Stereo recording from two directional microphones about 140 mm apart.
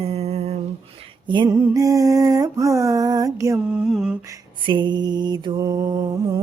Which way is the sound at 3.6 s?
5° right (ahead or behind).